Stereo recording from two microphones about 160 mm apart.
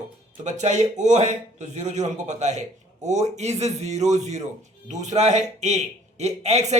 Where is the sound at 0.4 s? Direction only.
45° right (ahead or behind).